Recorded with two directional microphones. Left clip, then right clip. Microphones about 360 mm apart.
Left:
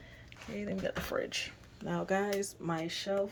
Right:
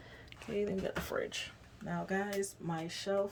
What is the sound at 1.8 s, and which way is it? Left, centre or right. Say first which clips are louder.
Speech: left 4 dB; centre.